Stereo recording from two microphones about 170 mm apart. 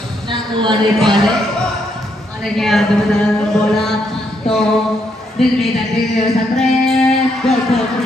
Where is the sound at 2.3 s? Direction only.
Centre (ahead or behind).